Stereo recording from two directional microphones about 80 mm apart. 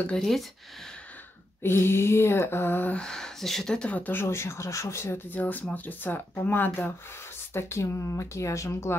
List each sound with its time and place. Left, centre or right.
0.2 s speech: centre
1.6 s speech: left
3.0 s speech: centre; by 5.2 s left
5.3 s speech: left